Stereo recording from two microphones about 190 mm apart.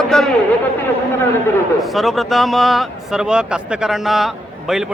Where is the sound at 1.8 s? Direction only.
Centre (ahead or behind).